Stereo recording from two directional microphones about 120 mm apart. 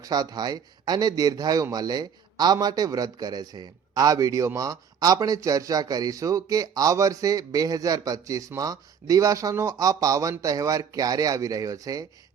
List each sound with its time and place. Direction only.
0.0 s a man's voice: 30° right (ahead or behind)